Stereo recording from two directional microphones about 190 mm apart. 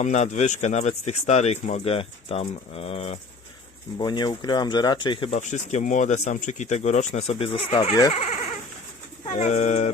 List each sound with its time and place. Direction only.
0.0 s speech: 40° left (ahead or behind)
5.4 s speech: 40° left (ahead or behind)